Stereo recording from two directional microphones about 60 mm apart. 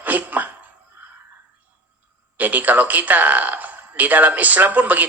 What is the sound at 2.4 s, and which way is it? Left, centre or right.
A man's voice, right.